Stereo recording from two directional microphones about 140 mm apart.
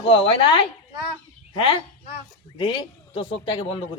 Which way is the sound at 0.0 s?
40° left (ahead or behind).